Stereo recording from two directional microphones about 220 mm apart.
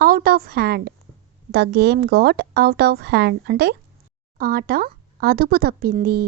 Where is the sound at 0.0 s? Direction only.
40° right (ahead or behind).